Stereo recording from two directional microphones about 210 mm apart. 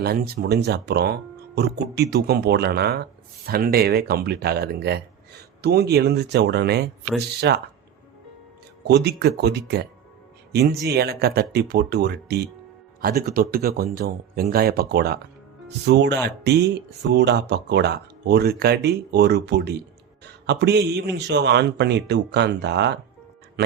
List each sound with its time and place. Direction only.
0.0 s speech: 45° right (ahead or behind)
8.9 s speech: 50° right (ahead or behind)